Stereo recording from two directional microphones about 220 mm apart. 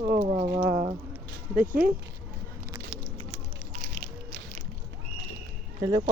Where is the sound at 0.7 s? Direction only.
15° right (ahead or behind).